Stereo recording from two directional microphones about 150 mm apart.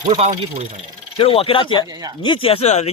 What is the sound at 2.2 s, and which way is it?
Speech, 35° left (ahead or behind).